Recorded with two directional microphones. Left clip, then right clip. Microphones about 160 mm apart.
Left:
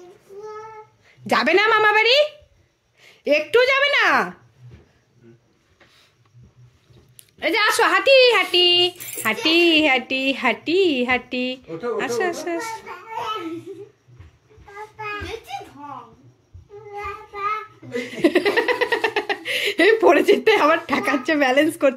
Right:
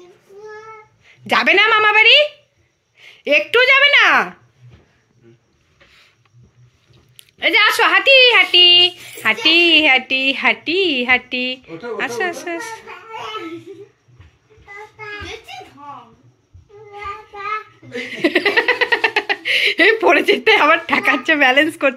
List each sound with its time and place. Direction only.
1.0 s a woman's voice: 25° left (ahead or behind)
7.2 s a woman's voice: 20° left (ahead or behind)
16.9 s child singing: 15° left (ahead or behind)
18.0 s speech: 15° left (ahead or behind)